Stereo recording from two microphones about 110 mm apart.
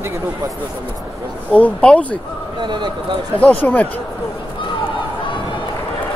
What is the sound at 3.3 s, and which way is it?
Speech, 15° left (ahead or behind).